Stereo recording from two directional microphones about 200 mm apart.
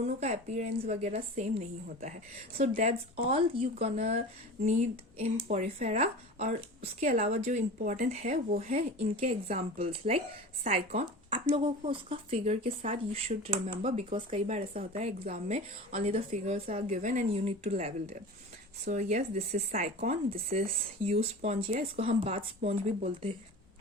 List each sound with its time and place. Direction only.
0.0 s a woman's voice: 30° right (ahead or behind)